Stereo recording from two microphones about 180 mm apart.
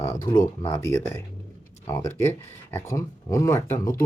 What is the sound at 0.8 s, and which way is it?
Speech, 15° left (ahead or behind).